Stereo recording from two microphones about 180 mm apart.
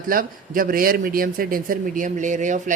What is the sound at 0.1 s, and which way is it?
A man's voice, 50° right (ahead or behind).